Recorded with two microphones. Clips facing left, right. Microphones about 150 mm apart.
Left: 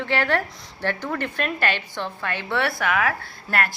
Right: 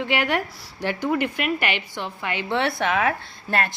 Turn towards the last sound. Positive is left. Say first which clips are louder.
# even
turn(degrees=-25)  # may be behind; listen again after turning